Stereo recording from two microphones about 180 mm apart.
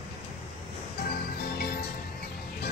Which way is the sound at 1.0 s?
60° left (ahead or behind).